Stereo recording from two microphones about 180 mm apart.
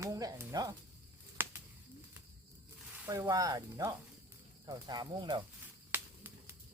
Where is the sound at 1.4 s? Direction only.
10° right (ahead or behind).